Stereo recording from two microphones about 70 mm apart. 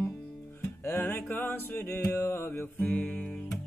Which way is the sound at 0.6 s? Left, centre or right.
Left.